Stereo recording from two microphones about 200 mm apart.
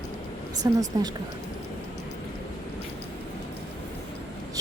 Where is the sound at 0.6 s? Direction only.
20° right (ahead or behind).